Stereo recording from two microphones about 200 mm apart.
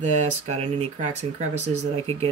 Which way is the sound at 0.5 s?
35° right (ahead or behind).